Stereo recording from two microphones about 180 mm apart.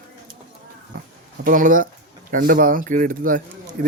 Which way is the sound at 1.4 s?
50° right (ahead or behind).